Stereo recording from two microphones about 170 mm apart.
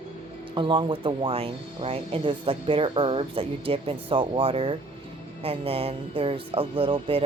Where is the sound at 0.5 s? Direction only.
30° right (ahead or behind).